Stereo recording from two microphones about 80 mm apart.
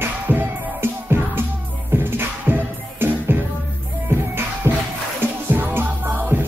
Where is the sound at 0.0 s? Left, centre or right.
Right.